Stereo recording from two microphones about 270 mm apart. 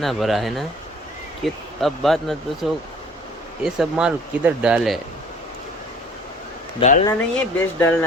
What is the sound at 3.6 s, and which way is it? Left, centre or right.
Speech, centre.